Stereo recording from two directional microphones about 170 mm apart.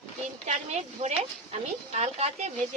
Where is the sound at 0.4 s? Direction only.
40° right (ahead or behind).